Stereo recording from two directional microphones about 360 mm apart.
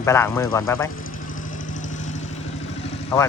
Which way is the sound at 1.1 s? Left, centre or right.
Left.